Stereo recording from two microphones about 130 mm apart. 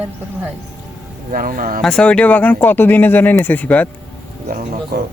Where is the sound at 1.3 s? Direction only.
90° right.